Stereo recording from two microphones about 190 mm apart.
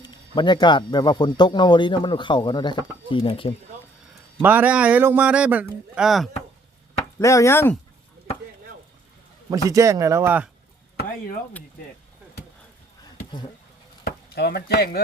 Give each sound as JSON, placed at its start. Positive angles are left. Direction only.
{"t": 0.0, "sound": "speech", "side_deg": 25}
{"t": 4.4, "sound": "speech", "side_deg": -10}
{"t": 7.2, "sound": "speech", "side_deg": 15}
{"t": 9.5, "sound": "speech", "side_deg": -15}
{"t": 14.0, "sound": "speech", "side_deg": 55}